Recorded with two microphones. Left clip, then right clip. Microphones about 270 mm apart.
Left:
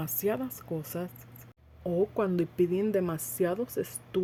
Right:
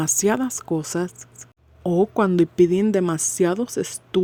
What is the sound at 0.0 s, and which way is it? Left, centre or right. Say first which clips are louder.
Speech: right 10 dB; right.